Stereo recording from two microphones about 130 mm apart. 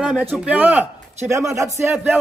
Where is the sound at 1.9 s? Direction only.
10° right (ahead or behind).